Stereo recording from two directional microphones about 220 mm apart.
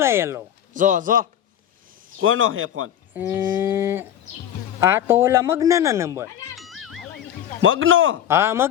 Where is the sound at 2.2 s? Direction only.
65° right (ahead or behind).